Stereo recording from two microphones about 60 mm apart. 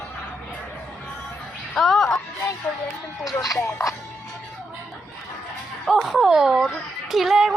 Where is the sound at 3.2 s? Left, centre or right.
Left.